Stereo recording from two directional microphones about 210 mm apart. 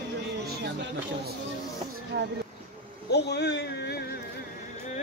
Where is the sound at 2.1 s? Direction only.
50° right (ahead or behind).